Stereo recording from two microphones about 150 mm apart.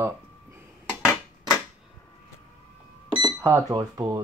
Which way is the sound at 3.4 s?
20° right (ahead or behind).